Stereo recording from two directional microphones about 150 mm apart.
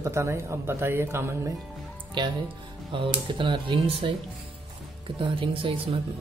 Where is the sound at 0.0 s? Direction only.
20° right (ahead or behind).